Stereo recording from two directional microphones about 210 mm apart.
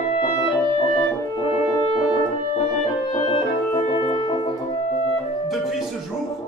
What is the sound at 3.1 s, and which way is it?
Music, 25° left (ahead or behind).